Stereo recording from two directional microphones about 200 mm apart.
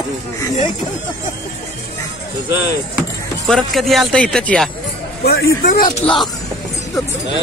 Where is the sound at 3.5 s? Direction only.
Centre (ahead or behind).